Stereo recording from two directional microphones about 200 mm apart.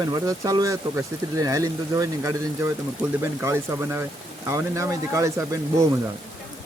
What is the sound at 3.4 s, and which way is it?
Speech, 15° right (ahead or behind).